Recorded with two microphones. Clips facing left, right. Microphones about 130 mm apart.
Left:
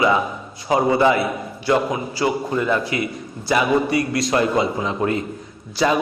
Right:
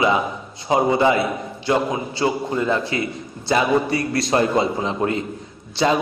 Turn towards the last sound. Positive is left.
turn(degrees=-25)  # may be behind; listen again after turning